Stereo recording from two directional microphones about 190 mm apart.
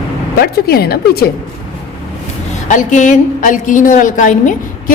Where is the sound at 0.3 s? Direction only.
55° left (ahead or behind).